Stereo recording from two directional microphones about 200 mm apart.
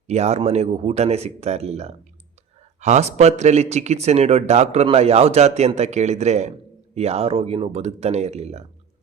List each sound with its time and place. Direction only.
0.1 s speech: 35° right (ahead or behind)